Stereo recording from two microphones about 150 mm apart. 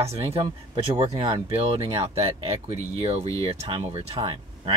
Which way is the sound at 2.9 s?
40° right (ahead or behind).